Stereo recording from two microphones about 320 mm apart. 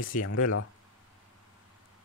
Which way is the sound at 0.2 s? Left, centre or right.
Left.